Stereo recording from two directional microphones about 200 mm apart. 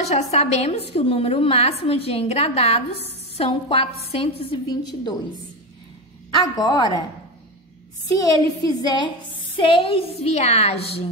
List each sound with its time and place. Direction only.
0.0 s a woman's voice: 35° left (ahead or behind)
6.3 s a woman's voice: 20° left (ahead or behind)
8.1 s a woman's voice: 20° left (ahead or behind)